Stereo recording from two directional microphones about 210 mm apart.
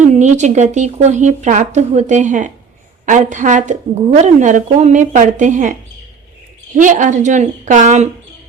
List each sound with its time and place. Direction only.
0.0 s a woman's voice: 35° right (ahead or behind)
6.7 s a woman's voice: 35° right (ahead or behind)